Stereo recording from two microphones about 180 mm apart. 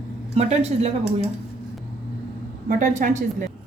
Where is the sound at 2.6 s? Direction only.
45° right (ahead or behind).